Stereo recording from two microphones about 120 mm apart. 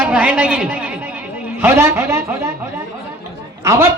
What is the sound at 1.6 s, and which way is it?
Speech, 20° right (ahead or behind).